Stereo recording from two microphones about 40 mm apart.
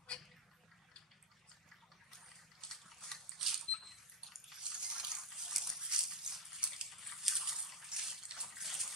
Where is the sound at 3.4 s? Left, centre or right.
Centre.